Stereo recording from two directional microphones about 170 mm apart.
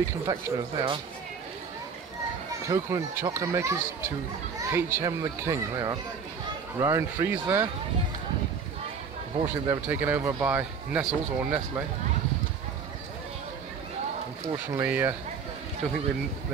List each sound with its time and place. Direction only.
0.3 s speech: 30° right (ahead or behind)
2.7 s speech: 15° right (ahead or behind)
9.7 s speech: 10° right (ahead or behind)
14.5 s speech: 15° right (ahead or behind)